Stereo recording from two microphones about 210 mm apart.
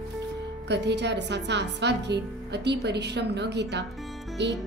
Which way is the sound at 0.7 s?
55° right (ahead or behind).